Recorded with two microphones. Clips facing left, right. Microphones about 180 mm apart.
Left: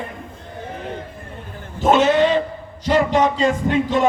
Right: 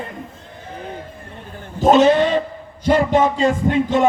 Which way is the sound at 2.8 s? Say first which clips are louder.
Right 1 dB; 50° right (ahead or behind).